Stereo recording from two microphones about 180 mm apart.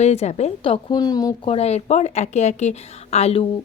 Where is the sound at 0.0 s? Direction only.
40° left (ahead or behind); by 1.4 s 20° left (ahead or behind).